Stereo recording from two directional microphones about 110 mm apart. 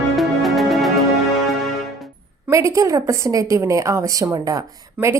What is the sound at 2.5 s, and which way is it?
A woman's voice, 30° right (ahead or behind).